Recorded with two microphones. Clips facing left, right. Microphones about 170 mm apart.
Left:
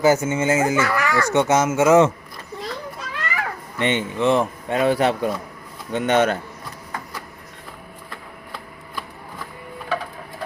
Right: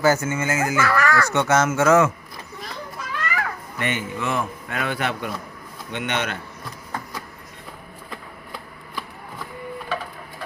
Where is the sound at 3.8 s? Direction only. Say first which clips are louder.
Left 6 dB; 25° left (ahead or behind).